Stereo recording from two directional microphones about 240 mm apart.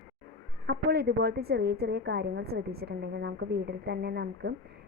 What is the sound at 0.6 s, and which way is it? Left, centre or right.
A woman's voice, right.